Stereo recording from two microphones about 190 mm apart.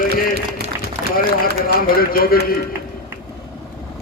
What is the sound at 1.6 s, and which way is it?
Speech, 50° left (ahead or behind).